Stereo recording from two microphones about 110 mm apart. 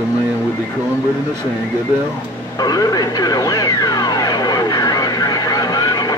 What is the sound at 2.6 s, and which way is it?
Music, 35° left (ahead or behind).